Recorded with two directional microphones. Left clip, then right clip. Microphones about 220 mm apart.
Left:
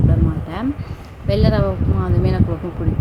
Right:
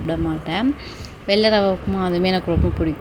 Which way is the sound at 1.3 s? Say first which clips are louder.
Right 3 dB; 5° right (ahead or behind).